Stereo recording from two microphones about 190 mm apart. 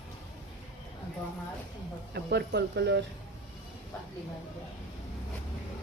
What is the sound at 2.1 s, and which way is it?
Speech, 60° right (ahead or behind).